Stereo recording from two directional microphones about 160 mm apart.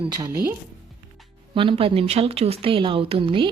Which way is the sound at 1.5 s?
35° right (ahead or behind).